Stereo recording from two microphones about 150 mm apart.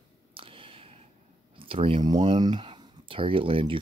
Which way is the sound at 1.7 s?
35° right (ahead or behind).